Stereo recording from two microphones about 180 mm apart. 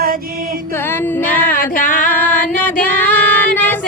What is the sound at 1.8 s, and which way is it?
Music, 45° left (ahead or behind).